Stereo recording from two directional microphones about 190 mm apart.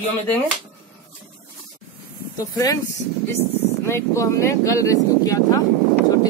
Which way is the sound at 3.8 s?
15° left (ahead or behind).